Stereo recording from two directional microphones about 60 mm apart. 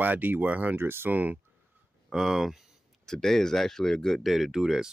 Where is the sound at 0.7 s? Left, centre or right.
Right.